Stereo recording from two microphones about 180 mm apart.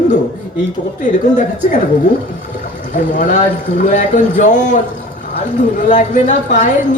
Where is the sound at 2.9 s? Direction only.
45° left (ahead or behind).